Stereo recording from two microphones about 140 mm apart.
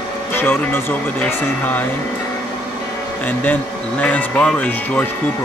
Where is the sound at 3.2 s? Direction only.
10° left (ahead or behind).